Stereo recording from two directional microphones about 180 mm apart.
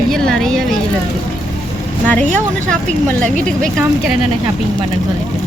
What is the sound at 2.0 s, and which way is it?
Speech, 10° left (ahead or behind).